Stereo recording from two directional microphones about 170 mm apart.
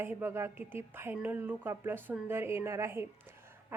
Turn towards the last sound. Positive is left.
turn(degrees=-15)  # may be behind; listen again after turning